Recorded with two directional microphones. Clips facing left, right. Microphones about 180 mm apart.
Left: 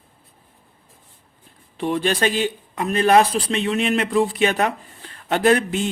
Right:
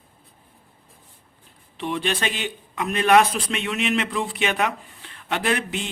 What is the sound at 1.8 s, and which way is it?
Speech, 40° left (ahead or behind).